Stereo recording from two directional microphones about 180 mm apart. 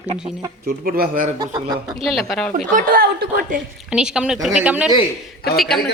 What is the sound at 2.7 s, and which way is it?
Speech, 55° right (ahead or behind).